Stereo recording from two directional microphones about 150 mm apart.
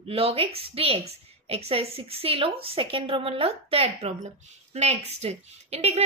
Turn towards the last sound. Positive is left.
turn(degrees=-45)  # may be behind; listen again after turning